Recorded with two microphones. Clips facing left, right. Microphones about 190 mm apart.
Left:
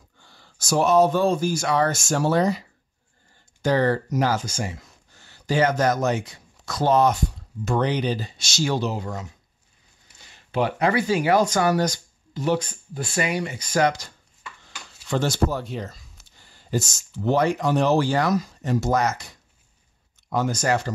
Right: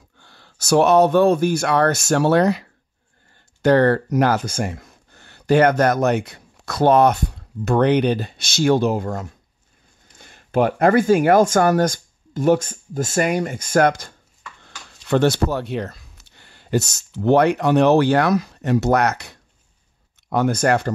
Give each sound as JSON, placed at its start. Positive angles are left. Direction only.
{"t": 0.2, "sound": "speech", "side_deg": -70}
{"t": 15.0, "sound": "speech", "side_deg": -65}